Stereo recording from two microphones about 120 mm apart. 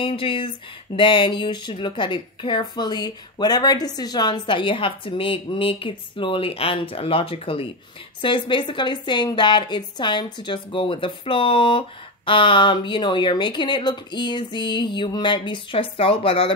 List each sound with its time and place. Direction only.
0.0 s speech: 45° left (ahead or behind)